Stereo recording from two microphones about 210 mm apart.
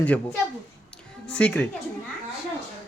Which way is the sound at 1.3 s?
5° left (ahead or behind).